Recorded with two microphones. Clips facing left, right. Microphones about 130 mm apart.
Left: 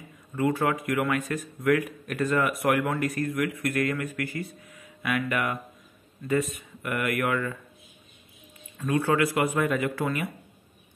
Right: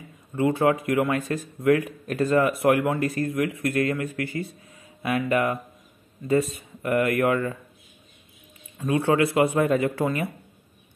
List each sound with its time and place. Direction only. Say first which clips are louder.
0.4 s a man's voice: right 4 dB; 25° right (ahead or behind)
8.7 s a man's voice: right 3 dB; 25° right (ahead or behind)